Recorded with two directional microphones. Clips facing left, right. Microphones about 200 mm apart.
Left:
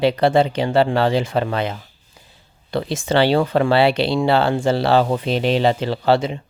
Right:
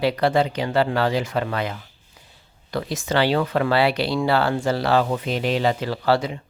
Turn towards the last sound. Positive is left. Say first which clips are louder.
# left 3 dB
turn(degrees=25)  # may be behind; listen again after turning